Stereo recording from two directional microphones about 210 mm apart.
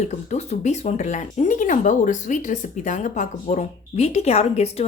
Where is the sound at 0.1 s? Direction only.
35° left (ahead or behind).